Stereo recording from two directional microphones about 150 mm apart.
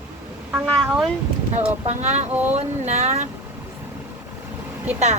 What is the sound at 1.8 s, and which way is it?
A woman's voice, 50° right (ahead or behind).